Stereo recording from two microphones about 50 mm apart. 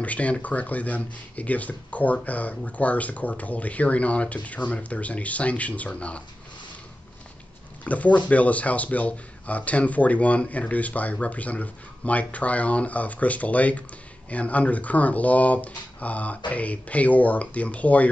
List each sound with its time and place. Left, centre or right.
0.0 s speech: left
7.8 s speech: left